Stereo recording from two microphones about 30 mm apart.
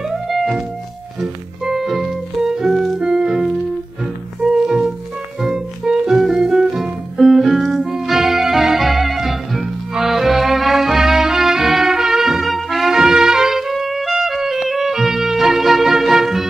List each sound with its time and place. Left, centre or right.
0.3 s music: centre
1.2 s music: centre
3.0 s music: right
4.6 s music: centre
6.7 s music: centre
7.6 s music: centre
12.4 s trumpet: centre
12.9 s music: centre